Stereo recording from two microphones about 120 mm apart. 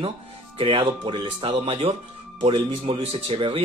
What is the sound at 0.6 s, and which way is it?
Speech, 50° right (ahead or behind).